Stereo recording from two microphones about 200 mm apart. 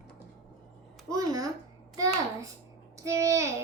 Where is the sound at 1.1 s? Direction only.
15° right (ahead or behind).